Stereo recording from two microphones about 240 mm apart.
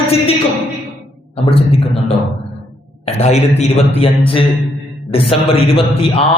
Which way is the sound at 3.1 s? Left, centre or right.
Left.